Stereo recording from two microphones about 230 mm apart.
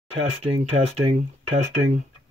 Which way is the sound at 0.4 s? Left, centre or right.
Right.